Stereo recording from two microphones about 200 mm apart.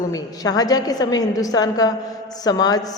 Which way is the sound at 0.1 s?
20° left (ahead or behind).